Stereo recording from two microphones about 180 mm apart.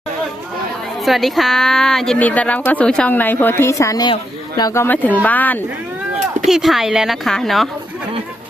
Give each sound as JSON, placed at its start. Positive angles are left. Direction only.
{"t": 1.0, "sound": "a woman's voice", "side_deg": 0}
{"t": 6.5, "sound": "speech", "side_deg": 0}